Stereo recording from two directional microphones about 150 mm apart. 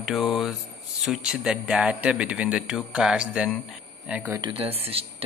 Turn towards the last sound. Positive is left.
turn(degrees=-40)  # may be behind; listen again after turning